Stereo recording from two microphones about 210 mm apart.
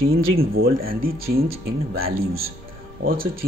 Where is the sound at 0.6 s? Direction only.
45° right (ahead or behind).